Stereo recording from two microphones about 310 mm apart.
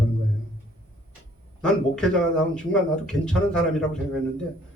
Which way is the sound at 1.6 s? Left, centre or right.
Centre.